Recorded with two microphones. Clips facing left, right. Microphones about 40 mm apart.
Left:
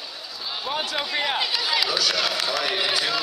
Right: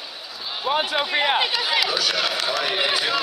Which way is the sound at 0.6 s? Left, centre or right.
Right.